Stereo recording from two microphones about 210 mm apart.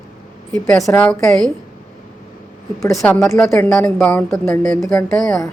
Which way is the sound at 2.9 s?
Centre (ahead or behind).